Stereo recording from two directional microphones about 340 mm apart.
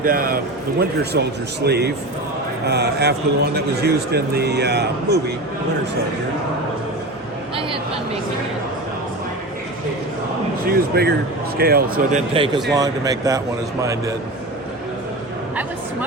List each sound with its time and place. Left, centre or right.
0.0 s a man's voice: right
10.7 s a man's voice: right
12.7 s speech: centre